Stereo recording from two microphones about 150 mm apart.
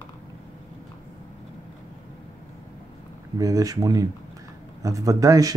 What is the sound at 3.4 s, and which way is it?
Speech, 25° right (ahead or behind).